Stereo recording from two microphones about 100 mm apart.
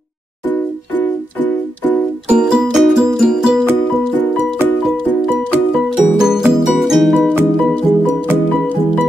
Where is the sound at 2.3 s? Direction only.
10° right (ahead or behind).